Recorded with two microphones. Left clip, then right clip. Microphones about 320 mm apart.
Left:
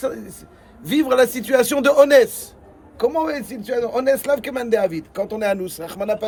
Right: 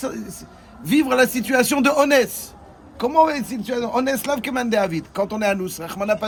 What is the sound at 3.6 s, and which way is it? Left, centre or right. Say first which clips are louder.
Speech: left 2 dB; centre.